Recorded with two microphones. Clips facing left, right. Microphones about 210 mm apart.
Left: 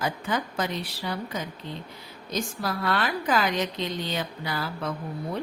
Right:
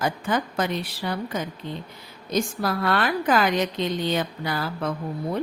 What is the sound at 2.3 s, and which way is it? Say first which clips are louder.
A woman's voice: right 5 dB; 55° right (ahead or behind).